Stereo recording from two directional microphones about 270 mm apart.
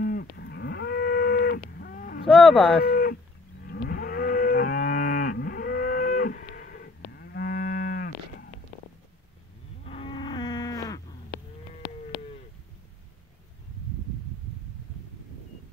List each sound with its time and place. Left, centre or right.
0.0 s moo: left
2.4 s speech: centre
2.8 s livestock: left
9.8 s cattle: centre